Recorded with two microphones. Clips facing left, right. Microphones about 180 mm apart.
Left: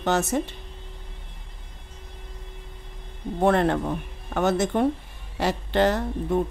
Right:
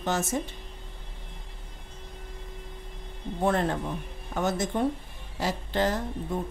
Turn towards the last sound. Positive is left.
turn(degrees=70)  # may be behind; listen again after turning